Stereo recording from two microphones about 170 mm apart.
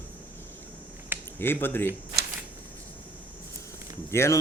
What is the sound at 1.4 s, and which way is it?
Speech, 15° left (ahead or behind).